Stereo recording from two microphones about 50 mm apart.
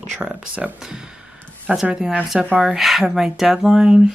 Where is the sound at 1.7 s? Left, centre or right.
Right.